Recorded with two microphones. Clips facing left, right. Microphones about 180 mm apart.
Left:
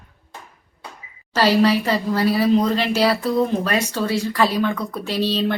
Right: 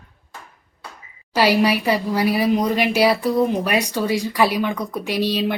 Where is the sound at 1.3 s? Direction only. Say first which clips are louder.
Left 1 dB; 10° right (ahead or behind).